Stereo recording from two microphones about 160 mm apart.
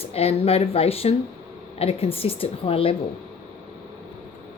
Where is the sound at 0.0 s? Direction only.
40° left (ahead or behind).